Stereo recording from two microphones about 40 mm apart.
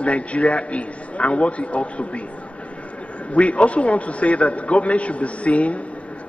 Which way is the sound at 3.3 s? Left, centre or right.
Left.